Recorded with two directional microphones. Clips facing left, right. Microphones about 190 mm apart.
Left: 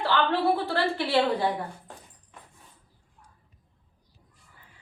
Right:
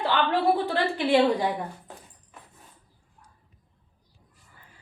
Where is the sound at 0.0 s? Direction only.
15° right (ahead or behind).